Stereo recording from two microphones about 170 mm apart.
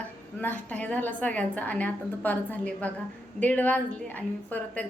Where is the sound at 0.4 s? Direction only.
10° left (ahead or behind).